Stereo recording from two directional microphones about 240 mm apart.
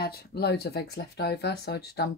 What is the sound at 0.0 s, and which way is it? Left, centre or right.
Speech, left.